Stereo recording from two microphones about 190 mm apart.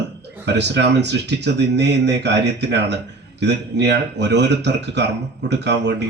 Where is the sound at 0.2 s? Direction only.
65° right (ahead or behind).